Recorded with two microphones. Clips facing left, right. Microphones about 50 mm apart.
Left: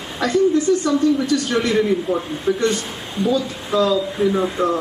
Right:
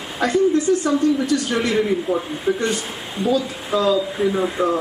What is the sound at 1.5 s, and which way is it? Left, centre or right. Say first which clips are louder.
Speech: left 2 dB; centre.